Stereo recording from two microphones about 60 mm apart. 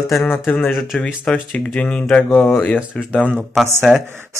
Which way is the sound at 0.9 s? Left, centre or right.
Centre.